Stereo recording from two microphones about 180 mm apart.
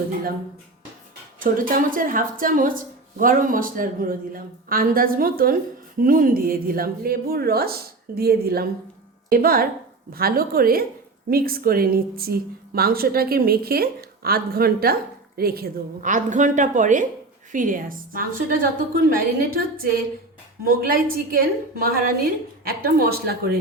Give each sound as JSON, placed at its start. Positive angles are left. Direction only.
{"t": 1.4, "sound": "a woman's voice", "side_deg": -50}